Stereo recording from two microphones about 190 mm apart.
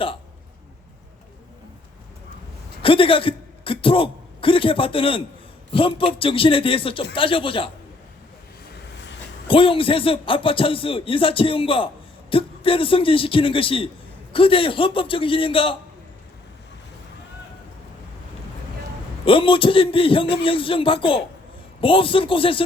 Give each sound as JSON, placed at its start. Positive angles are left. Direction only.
{"t": 2.8, "sound": "a man's voice", "side_deg": 30}
{"t": 8.7, "sound": "vehicle", "side_deg": 65}
{"t": 9.5, "sound": "a man's voice", "side_deg": 30}
{"t": 19.2, "sound": "a man's voice", "side_deg": 30}